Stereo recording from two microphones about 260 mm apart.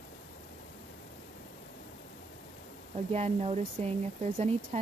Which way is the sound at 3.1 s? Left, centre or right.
Right.